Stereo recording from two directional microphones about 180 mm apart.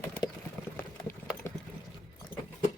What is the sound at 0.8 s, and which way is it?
Clip-clop, 15° left (ahead or behind).